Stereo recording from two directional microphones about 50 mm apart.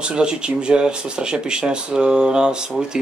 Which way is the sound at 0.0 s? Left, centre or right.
Centre.